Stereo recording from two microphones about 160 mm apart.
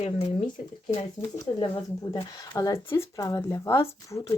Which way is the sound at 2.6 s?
20° left (ahead or behind).